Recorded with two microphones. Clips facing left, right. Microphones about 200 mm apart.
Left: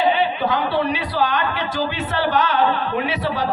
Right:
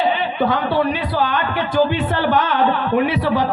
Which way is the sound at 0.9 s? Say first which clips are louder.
Right 1 dB; 50° right (ahead or behind).